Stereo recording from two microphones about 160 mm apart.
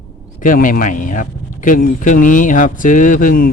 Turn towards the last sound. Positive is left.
turn(degrees=55)  # may be behind; listen again after turning